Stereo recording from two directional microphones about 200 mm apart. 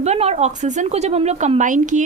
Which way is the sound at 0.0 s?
30° right (ahead or behind).